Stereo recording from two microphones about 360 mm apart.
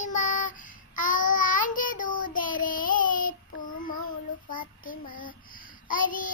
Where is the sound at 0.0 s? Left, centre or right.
Left.